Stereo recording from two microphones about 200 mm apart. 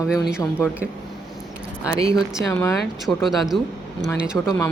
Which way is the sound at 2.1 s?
Centre (ahead or behind).